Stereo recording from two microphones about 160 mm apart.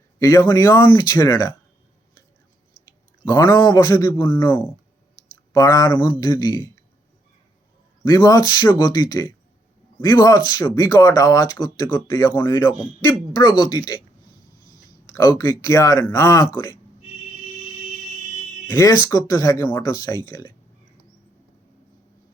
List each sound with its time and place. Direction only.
0.2 s speech: 20° left (ahead or behind)
3.3 s speech: 25° left (ahead or behind)
4.3 s speech: 10° left (ahead or behind)
8.0 s speech: 25° left (ahead or behind)
15.1 s speech: 20° left (ahead or behind)
18.7 s speech: 20° left (ahead or behind)